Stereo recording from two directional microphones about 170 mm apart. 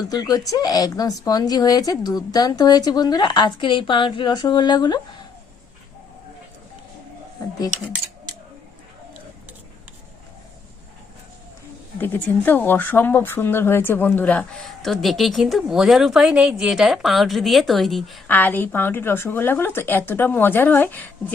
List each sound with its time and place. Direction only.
0.1 s a woman's voice: 20° left (ahead or behind)
11.9 s speech: 10° left (ahead or behind)
18.3 s speech: 10° left (ahead or behind)